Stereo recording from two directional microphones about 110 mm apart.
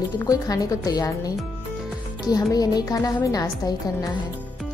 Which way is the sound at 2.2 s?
35° left (ahead or behind).